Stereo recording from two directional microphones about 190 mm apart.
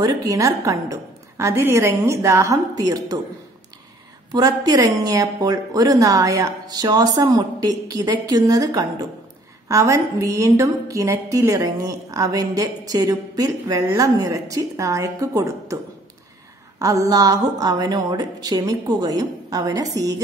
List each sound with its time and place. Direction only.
0.0 s a woman's voice: 15° right (ahead or behind)
4.3 s a woman's voice: 20° right (ahead or behind)